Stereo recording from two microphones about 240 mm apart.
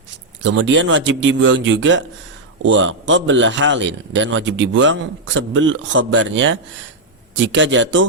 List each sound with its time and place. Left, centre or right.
0.4 s a man's voice: right